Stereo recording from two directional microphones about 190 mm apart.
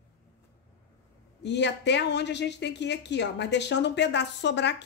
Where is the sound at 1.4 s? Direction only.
65° left (ahead or behind).